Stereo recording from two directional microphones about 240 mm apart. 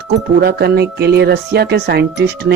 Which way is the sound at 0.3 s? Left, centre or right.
Right.